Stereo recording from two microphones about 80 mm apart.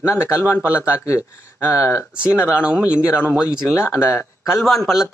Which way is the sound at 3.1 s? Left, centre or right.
Left.